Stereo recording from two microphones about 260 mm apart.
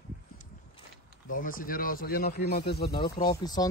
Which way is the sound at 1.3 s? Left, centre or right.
Left.